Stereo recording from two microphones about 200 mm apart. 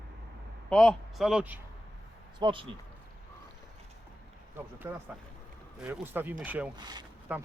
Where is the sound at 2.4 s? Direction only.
25° right (ahead or behind).